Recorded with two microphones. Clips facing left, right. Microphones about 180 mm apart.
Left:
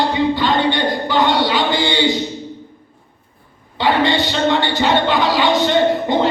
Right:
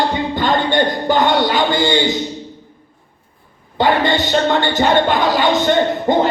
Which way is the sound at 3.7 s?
45° right (ahead or behind).